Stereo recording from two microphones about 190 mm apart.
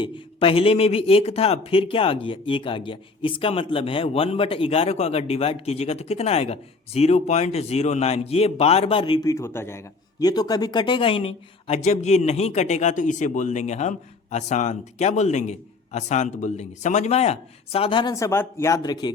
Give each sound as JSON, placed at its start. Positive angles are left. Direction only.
{"t": 0.0, "sound": "a man's voice", "side_deg": 30}